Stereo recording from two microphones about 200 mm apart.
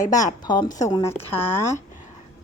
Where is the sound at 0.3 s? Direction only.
20° left (ahead or behind).